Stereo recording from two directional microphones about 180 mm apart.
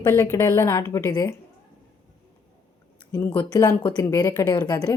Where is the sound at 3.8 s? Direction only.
25° left (ahead or behind).